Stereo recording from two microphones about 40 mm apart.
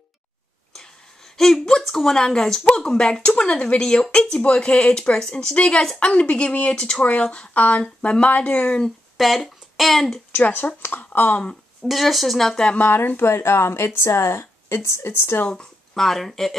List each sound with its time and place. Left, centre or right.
1.3 s speech: centre
2.1 s speech: centre
7.1 s speech: left
8.0 s speech: left
9.1 s speech: centre
10.3 s speech: left
11.8 s speech: centre
12.9 s speech: left
15.9 s speech: centre